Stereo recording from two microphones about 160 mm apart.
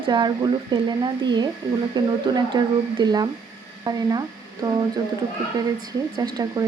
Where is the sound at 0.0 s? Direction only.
30° right (ahead or behind).